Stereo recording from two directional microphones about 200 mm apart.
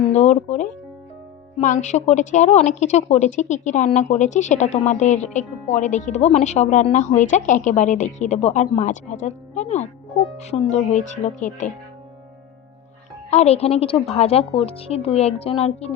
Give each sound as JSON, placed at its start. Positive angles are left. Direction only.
{"t": 0.1, "sound": "music", "side_deg": 35}
{"t": 1.6, "sound": "a woman's voice", "side_deg": 35}
{"t": 13.3, "sound": "a woman's voice", "side_deg": 30}